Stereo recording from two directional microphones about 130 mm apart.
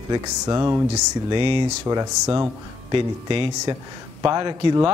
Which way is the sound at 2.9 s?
40° right (ahead or behind).